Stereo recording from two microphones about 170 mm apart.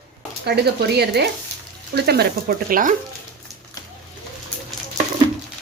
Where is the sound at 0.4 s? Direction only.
70° right (ahead or behind); by 2.9 s 55° right (ahead or behind).